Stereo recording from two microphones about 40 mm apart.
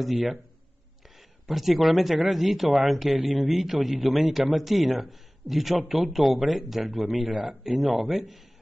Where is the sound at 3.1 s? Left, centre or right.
Centre.